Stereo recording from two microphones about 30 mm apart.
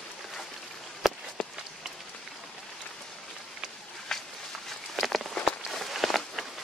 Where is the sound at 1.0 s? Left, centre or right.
Centre.